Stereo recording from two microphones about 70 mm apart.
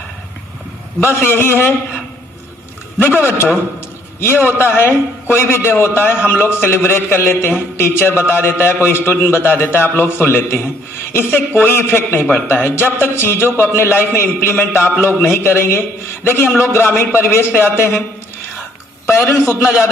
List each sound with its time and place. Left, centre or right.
1.0 s a man's voice: left
3.0 s a man's voice: left
4.5 s a man's voice: left
19.0 s a man's voice: left